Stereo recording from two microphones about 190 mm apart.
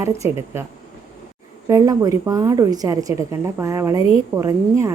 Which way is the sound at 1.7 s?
20° right (ahead or behind).